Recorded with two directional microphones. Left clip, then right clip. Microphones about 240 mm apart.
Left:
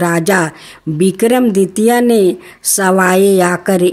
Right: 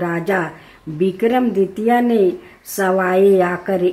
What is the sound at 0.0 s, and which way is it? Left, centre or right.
Speech, left.